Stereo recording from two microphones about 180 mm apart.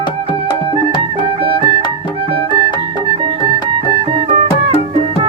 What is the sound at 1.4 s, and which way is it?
Music, 30° right (ahead or behind).